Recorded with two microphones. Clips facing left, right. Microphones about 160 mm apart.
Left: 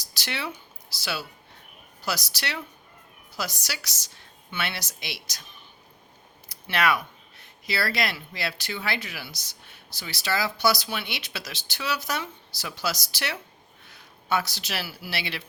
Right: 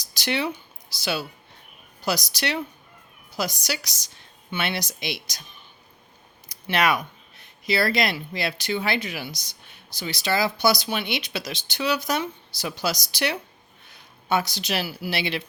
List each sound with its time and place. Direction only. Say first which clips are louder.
0.0 s speech: right 7 dB; 20° right (ahead or behind)
6.5 s a sound: right 2 dB; 20° right (ahead or behind)
7.6 s speech: right 5 dB; 20° right (ahead or behind)